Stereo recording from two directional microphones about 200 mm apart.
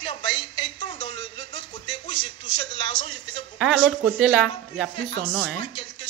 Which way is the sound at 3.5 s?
Centre (ahead or behind).